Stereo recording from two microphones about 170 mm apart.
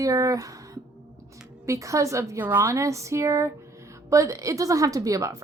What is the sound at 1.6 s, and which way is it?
A woman's voice, 20° right (ahead or behind).